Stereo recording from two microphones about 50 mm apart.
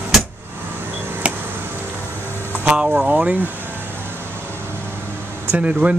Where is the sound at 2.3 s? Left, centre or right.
Right.